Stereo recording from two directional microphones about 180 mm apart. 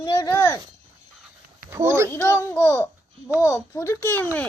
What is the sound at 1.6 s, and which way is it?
Speech, 15° right (ahead or behind).